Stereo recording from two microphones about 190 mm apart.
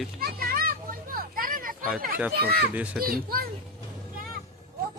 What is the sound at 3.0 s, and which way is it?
Speech, 50° right (ahead or behind).